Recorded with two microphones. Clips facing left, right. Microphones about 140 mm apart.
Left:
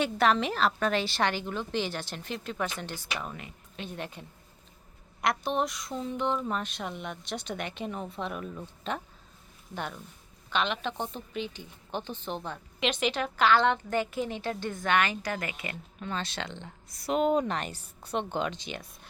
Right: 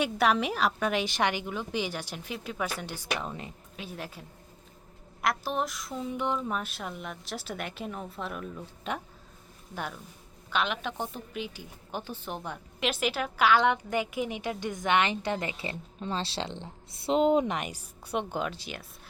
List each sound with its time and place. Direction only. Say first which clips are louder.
0.0 s a woman's voice: even; 10° right (ahead or behind)
3.2 s speech: right 3 dB; 30° right (ahead or behind)
3.8 s speech: left 2 dB; 5° right (ahead or behind)
8.9 s a woman's voice: even; 10° right (ahead or behind)